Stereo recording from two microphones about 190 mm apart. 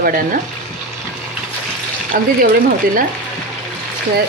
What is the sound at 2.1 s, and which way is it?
Speech, 45° right (ahead or behind).